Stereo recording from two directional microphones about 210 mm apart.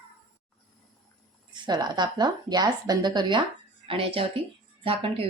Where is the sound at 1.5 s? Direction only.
20° right (ahead or behind).